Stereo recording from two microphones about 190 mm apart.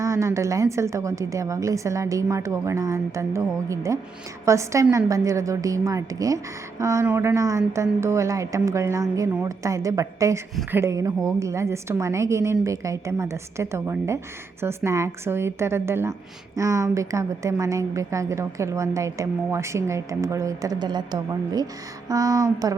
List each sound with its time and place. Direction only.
0.0 s a woman's voice: 15° right (ahead or behind)